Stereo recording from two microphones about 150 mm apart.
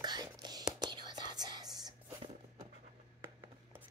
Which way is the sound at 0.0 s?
25° right (ahead or behind).